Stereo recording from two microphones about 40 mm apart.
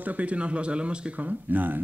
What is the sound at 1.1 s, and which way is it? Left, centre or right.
Speech, right.